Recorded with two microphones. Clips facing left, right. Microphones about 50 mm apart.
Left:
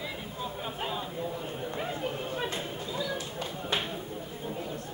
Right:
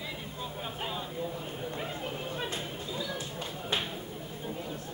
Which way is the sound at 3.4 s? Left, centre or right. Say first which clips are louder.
Left 1 dB; centre.